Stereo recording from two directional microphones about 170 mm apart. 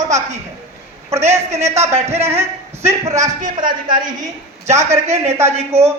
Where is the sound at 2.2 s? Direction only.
15° right (ahead or behind).